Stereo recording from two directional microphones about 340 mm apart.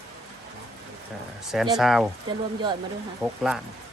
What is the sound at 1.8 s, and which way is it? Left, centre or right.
Speech, centre.